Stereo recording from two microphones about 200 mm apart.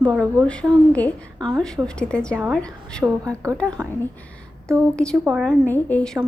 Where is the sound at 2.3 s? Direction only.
5° right (ahead or behind).